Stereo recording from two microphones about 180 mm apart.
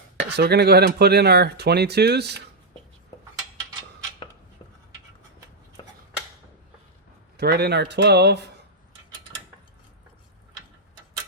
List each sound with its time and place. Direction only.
0.2 s speech: 65° right (ahead or behind)
5.8 s a sound: 25° left (ahead or behind)
7.3 s speech: 65° right (ahead or behind)